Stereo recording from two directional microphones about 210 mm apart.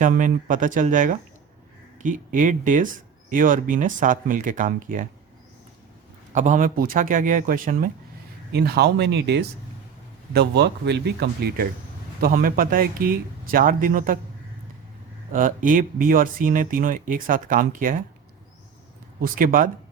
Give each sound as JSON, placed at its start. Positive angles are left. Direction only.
{"t": 0.0, "sound": "speech", "side_deg": -40}
{"t": 6.3, "sound": "speech", "side_deg": -35}
{"t": 15.3, "sound": "speech", "side_deg": -40}
{"t": 19.2, "sound": "speech", "side_deg": -40}